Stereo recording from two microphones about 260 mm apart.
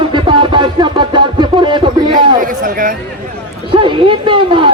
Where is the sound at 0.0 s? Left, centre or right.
Centre.